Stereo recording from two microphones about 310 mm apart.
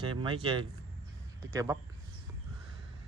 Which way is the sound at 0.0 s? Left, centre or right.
Centre.